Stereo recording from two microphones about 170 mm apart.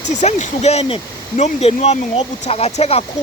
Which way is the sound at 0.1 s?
45° left (ahead or behind).